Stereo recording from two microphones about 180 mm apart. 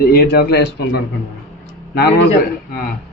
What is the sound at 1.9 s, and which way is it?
Speech, 60° left (ahead or behind).